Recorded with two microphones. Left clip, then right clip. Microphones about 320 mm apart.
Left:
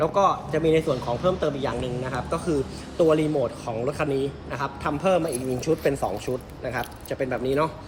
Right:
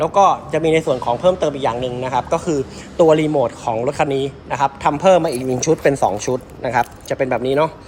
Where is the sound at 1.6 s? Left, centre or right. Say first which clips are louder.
Right 8 dB; centre.